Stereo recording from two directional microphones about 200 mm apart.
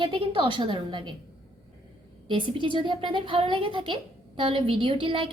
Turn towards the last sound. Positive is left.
turn(degrees=-25)  # may be behind; listen again after turning